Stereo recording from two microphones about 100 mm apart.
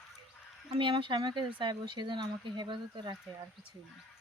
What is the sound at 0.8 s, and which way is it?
Speech, 55° right (ahead or behind).